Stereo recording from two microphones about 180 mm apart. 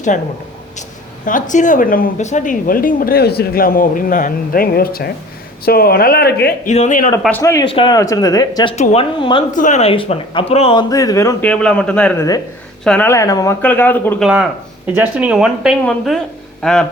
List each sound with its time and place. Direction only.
0.8 s speech: 45° left (ahead or behind); by 6.5 s 60° left (ahead or behind)
6.7 s speech: 40° left (ahead or behind)
7.2 s speech: 10° left (ahead or behind)
8.7 s speech: 40° left (ahead or behind)
9.5 s speech: 45° left (ahead or behind); by 14.2 s 10° left (ahead or behind)
14.2 s speech: 5° right (ahead or behind)